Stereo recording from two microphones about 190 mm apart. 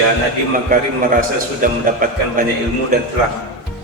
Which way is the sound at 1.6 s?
45° right (ahead or behind).